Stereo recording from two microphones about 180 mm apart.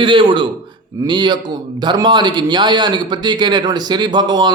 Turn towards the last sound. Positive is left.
turn(degrees=-25)  # may be behind; listen again after turning